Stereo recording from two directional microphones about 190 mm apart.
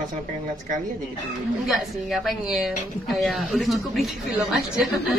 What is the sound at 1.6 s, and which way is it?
A woman's voice, centre (ahead or behind).